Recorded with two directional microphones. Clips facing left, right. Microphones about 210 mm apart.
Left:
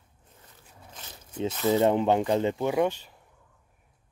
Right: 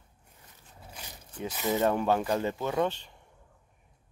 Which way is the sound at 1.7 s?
20° left (ahead or behind).